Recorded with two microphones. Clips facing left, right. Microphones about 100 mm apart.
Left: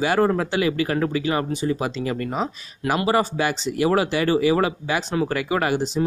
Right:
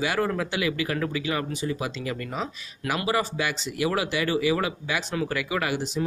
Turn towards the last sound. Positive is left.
turn(degrees=35)  # may be behind; listen again after turning